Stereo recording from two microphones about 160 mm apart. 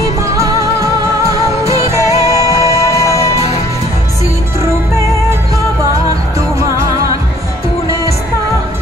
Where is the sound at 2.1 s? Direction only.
20° left (ahead or behind).